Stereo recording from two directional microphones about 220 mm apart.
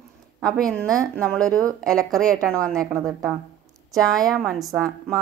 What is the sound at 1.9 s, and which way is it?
A woman's voice, centre (ahead or behind).